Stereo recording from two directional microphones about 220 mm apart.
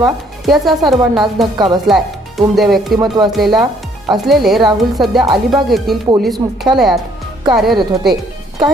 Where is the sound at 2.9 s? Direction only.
15° right (ahead or behind).